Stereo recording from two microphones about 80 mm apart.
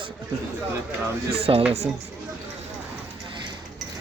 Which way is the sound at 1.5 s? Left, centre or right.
Right.